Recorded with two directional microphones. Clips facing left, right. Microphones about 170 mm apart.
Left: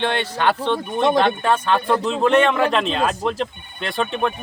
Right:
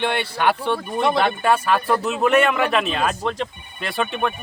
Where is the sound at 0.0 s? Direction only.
10° right (ahead or behind).